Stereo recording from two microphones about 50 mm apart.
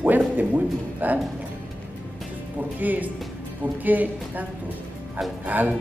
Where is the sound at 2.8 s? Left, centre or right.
Right.